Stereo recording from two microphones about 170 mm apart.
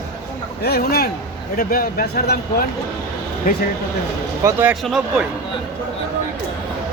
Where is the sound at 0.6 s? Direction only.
65° left (ahead or behind).